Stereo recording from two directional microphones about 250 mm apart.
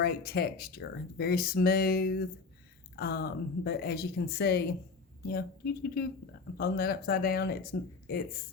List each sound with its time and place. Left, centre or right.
0.0 s speech: left